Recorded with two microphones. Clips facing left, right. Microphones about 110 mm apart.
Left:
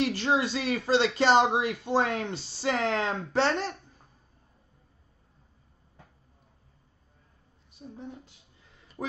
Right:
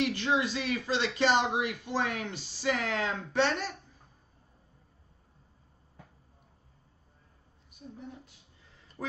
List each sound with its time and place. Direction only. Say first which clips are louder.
0.0 s speech: left 2 dB; 35° left (ahead or behind)